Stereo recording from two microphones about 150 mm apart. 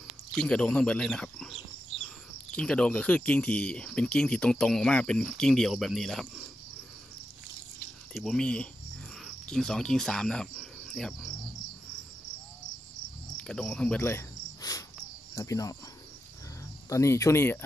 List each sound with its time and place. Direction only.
0.3 s speech: 5° left (ahead or behind)
8.1 s speech: 5° left (ahead or behind)
13.4 s cricket: 5° left (ahead or behind); by 14.9 s 25° left (ahead or behind)
15.3 s speech: 20° left (ahead or behind)
16.9 s speech: 20° left (ahead or behind)